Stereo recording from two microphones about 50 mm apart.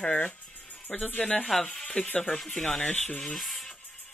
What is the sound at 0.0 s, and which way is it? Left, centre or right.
Speech, left.